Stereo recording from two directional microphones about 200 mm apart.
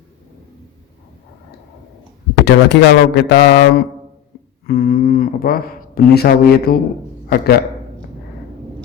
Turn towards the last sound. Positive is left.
turn(degrees=50)  # may be behind; listen again after turning